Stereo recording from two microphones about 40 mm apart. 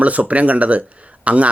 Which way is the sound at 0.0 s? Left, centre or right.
Right.